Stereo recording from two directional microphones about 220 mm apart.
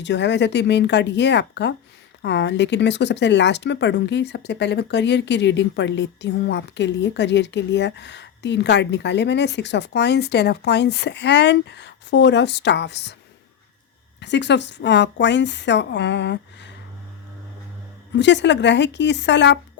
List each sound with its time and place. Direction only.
0.0 s speech: 55° left (ahead or behind)
14.2 s speech: 55° left (ahead or behind)
18.1 s speech: 55° left (ahead or behind)